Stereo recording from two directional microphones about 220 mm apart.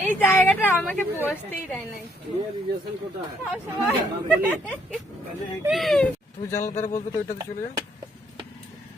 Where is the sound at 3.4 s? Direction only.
10° right (ahead or behind).